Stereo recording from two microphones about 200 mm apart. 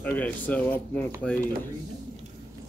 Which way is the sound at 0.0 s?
10° left (ahead or behind).